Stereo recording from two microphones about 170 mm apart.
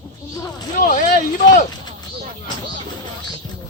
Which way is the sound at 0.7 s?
55° left (ahead or behind).